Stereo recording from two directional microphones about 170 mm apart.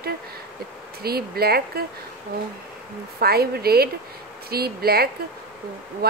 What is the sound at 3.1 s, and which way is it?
A woman's voice, 65° right (ahead or behind).